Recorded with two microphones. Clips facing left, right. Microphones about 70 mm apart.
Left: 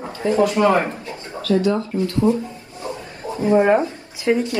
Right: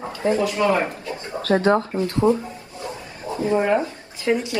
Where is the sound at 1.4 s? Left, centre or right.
Right.